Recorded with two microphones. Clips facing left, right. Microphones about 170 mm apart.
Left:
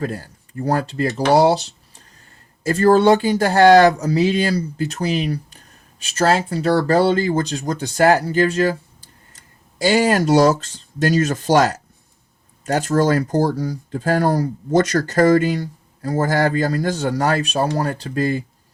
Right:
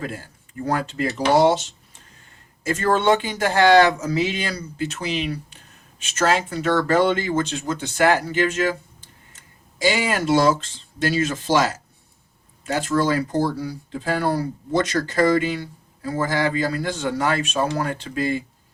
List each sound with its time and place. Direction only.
0.0 s speech: 40° left (ahead or behind)